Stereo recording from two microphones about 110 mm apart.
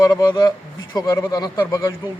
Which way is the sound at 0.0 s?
35° left (ahead or behind).